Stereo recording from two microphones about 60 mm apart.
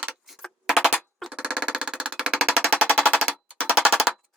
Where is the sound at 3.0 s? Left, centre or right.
Centre.